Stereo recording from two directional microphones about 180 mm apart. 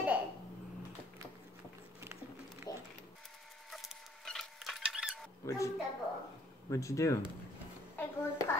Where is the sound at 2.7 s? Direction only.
20° left (ahead or behind).